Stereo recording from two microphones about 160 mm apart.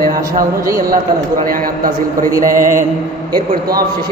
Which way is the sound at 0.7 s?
60° right (ahead or behind).